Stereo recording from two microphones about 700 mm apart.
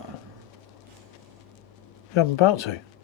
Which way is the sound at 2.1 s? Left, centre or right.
Left.